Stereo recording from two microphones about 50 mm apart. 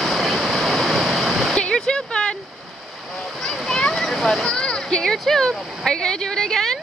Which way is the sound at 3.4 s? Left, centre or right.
Centre.